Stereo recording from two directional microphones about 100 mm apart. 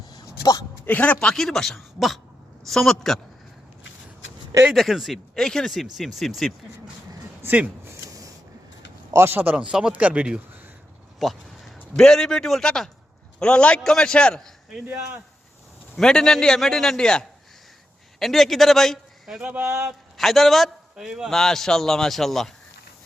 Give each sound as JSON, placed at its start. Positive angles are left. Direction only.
{"t": 0.1, "sound": "a sound", "side_deg": 40}
{"t": 0.9, "sound": "a man's voice", "side_deg": 15}
{"t": 4.7, "sound": "a man's voice", "side_deg": 0}
{"t": 7.4, "sound": "speech", "side_deg": -15}
{"t": 7.9, "sound": "a sound", "side_deg": -35}
{"t": 9.1, "sound": "speech", "side_deg": -25}
{"t": 11.2, "sound": "a man's voice", "side_deg": 0}
{"t": 16.0, "sound": "a man's voice", "side_deg": 5}
{"t": 19.4, "sound": "speech", "side_deg": -10}
{"t": 20.1, "sound": "a man's voice", "side_deg": 0}